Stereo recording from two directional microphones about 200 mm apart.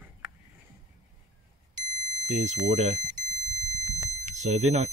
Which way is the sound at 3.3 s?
20° right (ahead or behind).